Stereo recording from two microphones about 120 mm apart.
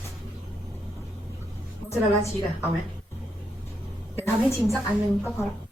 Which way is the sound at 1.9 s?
25° left (ahead or behind).